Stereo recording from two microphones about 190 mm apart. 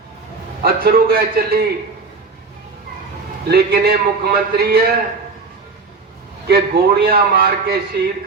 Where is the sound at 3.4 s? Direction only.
55° right (ahead or behind).